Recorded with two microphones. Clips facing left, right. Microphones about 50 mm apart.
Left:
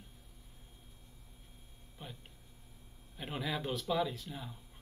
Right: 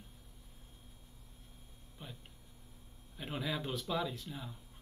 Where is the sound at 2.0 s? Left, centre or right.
Centre.